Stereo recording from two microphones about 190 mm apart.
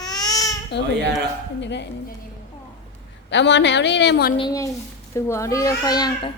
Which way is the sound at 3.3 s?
70° left (ahead or behind).